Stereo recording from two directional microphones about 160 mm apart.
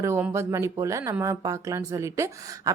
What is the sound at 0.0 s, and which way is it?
A woman's voice, 15° right (ahead or behind).